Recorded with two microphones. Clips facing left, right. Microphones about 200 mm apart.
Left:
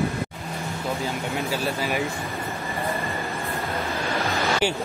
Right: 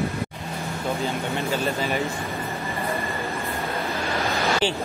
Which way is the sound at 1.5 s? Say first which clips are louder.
Right 2 dB; 5° left (ahead or behind).